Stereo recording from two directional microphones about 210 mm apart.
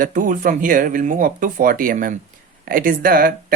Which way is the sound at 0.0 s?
40° right (ahead or behind).